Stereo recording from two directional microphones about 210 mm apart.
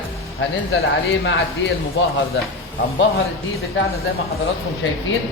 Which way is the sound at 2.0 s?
60° left (ahead or behind).